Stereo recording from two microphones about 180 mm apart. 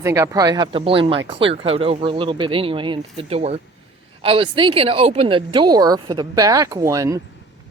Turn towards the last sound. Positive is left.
turn(degrees=-20)  # may be behind; listen again after turning